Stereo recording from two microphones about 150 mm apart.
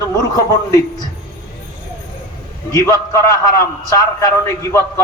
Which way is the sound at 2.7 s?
25° left (ahead or behind).